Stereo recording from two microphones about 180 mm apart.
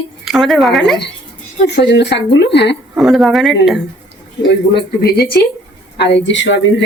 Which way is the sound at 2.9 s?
Centre (ahead or behind).